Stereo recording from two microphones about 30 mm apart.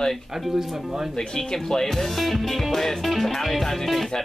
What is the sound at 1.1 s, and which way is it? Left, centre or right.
Speech, left.